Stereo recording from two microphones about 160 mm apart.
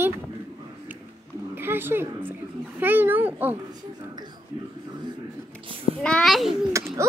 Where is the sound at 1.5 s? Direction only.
15° right (ahead or behind).